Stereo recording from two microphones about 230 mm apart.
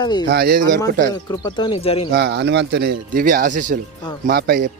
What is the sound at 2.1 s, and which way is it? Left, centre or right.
Speech, right.